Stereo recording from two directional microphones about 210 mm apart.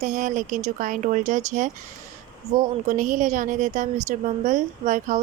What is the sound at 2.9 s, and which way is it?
A woman's voice, 40° right (ahead or behind).